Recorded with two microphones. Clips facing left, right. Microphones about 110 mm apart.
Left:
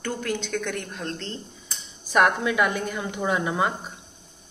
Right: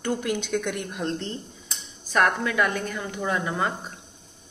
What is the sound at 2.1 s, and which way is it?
A woman's voice, 10° left (ahead or behind).